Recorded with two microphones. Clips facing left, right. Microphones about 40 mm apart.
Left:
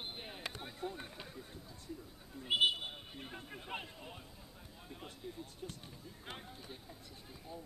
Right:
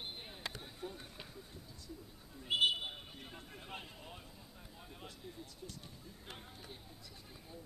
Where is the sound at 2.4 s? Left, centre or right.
Centre.